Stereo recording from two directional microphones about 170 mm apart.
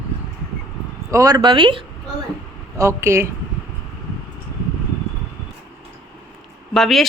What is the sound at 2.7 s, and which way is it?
Speech, 15° right (ahead or behind).